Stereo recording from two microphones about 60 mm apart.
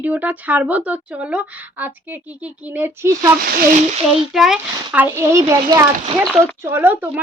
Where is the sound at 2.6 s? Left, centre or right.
Right.